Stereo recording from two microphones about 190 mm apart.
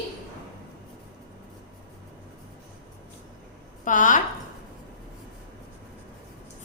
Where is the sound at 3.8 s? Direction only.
45° left (ahead or behind).